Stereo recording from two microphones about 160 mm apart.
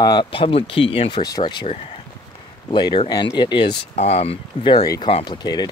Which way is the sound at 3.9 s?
40° left (ahead or behind).